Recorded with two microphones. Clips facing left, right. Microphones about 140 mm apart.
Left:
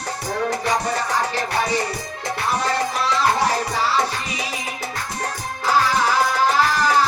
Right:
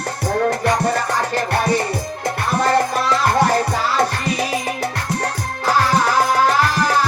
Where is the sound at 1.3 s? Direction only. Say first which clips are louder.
Right 4 dB; 55° right (ahead or behind).